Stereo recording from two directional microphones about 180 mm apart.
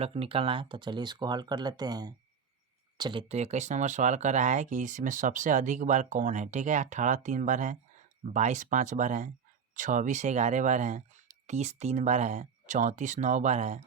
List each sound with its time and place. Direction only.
0.0 s speech: 35° right (ahead or behind)